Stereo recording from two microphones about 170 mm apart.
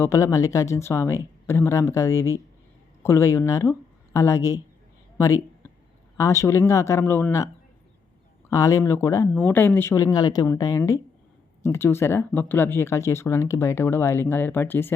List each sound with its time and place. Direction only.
0.0 s speech: 15° left (ahead or behind)